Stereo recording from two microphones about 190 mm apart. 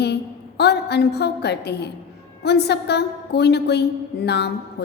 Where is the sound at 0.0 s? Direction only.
60° left (ahead or behind).